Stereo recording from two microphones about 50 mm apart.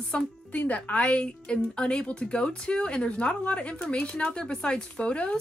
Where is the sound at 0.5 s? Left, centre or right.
Left.